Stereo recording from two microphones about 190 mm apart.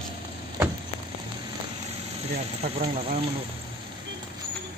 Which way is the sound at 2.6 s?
35° right (ahead or behind).